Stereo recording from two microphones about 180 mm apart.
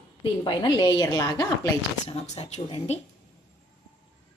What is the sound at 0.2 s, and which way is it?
A woman's voice, 25° left (ahead or behind).